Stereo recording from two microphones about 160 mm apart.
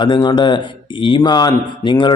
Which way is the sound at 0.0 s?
30° left (ahead or behind).